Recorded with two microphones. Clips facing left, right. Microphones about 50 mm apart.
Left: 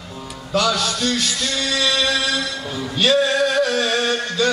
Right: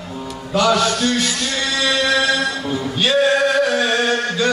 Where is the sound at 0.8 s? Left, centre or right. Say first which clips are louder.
Right 5 dB; right.